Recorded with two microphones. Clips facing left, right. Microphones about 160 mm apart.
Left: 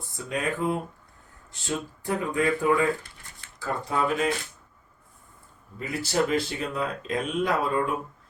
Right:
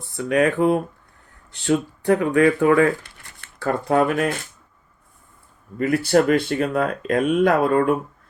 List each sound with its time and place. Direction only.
0.2 s speech: 70° right (ahead or behind)
5.8 s speech: 65° right (ahead or behind)